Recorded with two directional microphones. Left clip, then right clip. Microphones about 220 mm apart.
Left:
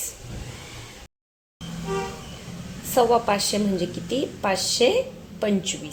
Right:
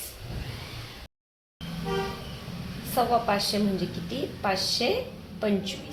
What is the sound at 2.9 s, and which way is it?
Speech, 50° left (ahead or behind).